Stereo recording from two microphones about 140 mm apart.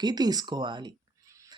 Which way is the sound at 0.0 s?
30° right (ahead or behind).